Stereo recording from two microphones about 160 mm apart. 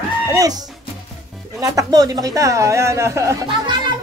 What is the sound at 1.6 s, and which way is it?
A man's voice, 20° right (ahead or behind).